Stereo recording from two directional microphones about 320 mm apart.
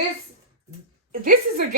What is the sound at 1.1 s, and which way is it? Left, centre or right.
Speech, right.